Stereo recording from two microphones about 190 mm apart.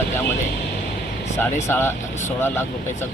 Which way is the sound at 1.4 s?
15° left (ahead or behind).